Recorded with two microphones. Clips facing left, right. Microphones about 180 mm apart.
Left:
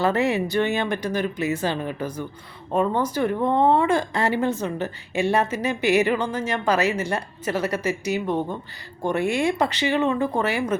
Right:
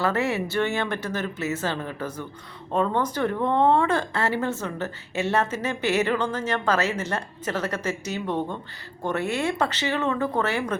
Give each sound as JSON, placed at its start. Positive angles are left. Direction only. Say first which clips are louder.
{"t": 0.0, "sound": "a woman's voice", "louder": "left 3 dB", "side_deg": 15}